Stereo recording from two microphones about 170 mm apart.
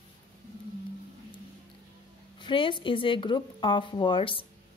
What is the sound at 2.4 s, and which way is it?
Speech, 30° left (ahead or behind).